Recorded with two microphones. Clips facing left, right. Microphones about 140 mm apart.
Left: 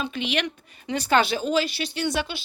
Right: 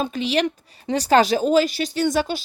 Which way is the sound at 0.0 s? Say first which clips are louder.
Right 6 dB; 40° right (ahead or behind).